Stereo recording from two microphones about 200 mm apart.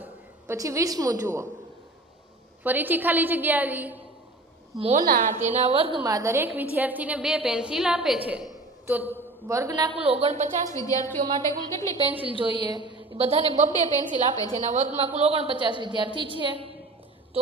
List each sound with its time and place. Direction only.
0.0 s a woman's voice: 15° right (ahead or behind)
2.6 s a woman's voice: 10° right (ahead or behind)
4.9 s a woman's voice: 45° right (ahead or behind); by 6.0 s 30° right (ahead or behind)
6.0 s a woman's voice: 15° right (ahead or behind)
10.1 s speech: 30° right (ahead or behind)
10.7 s a woman's voice: 15° left (ahead or behind)
12.2 s a woman's voice: 25° right (ahead or behind)
12.8 s a sound: 25° left (ahead or behind)
13.1 s speech: 30° right (ahead or behind)
14.3 s a woman's voice: 20° left (ahead or behind)
14.7 s a woman's voice: 35° right (ahead or behind)